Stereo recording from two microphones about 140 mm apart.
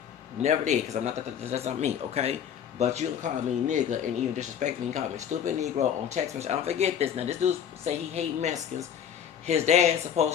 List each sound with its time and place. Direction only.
0.4 s speech: 55° right (ahead or behind)